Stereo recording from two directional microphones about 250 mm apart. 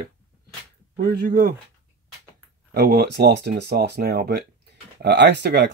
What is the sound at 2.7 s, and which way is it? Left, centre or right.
Speech, right.